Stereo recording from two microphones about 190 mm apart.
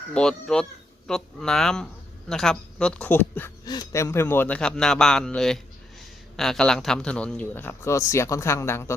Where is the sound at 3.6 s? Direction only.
20° left (ahead or behind).